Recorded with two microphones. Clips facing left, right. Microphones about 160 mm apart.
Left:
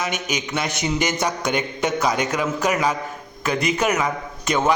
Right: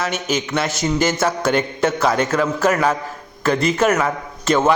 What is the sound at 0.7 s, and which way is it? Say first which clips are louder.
A man's voice: right 4 dB; 20° left (ahead or behind).